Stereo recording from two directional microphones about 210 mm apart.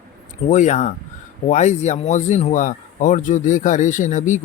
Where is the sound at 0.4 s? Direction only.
35° left (ahead or behind).